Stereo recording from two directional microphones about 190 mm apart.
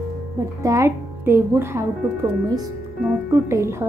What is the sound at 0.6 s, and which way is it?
Speech, 15° right (ahead or behind).